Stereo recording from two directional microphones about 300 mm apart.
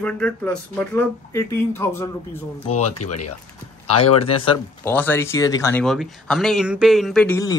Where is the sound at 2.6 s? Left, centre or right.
Left.